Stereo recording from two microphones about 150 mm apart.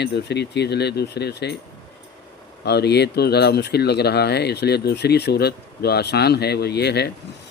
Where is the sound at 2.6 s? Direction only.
90° left.